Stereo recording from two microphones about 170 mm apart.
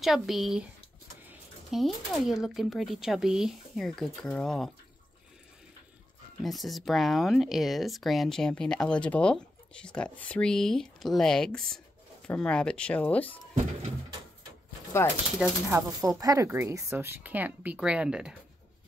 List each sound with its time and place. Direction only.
0.0 s speech: centre (ahead or behind)
6.4 s speech: centre (ahead or behind)
15.7 s speech: 20° right (ahead or behind); by 18.3 s 5° right (ahead or behind)